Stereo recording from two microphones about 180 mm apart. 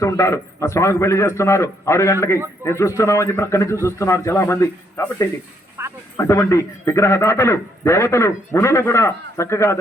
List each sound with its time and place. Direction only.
0.0 s a man's voice: 20° left (ahead or behind)
5.8 s speech: 15° right (ahead or behind)
6.1 s a man's voice: 15° left (ahead or behind)